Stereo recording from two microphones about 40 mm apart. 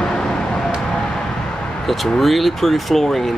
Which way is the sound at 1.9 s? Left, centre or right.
Centre.